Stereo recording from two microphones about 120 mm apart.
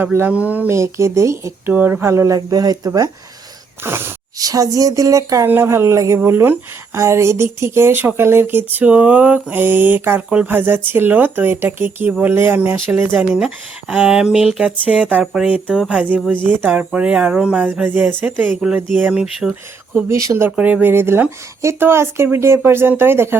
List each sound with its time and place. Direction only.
0.0 s speech: 20° right (ahead or behind)
0.8 s speech: 25° right (ahead or behind)
3.8 s speech: 20° right (ahead or behind)
4.4 s speech: 30° right (ahead or behind)
13.1 s speech: 5° right (ahead or behind)
20.1 s speech: 25° right (ahead or behind)